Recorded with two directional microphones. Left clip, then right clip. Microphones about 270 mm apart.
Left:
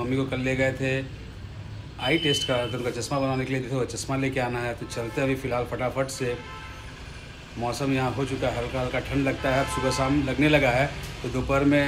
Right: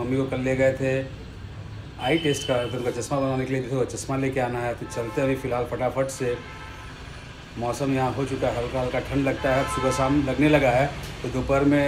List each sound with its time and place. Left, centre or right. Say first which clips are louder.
0.1 s speech: right 4 dB; centre
3.8 s speech: right 3 dB; centre
4.1 s speech: even; centre
7.8 s speech: right 2 dB; centre